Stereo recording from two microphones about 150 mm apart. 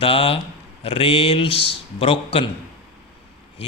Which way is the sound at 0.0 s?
40° left (ahead or behind).